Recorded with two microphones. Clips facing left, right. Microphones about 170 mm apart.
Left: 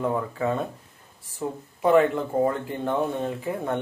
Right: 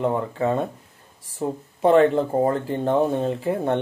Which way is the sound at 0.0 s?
30° right (ahead or behind).